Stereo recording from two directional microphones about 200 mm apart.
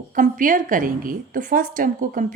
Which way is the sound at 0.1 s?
40° right (ahead or behind).